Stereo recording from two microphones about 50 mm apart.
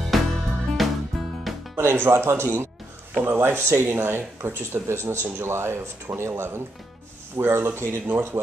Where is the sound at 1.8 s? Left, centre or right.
Right.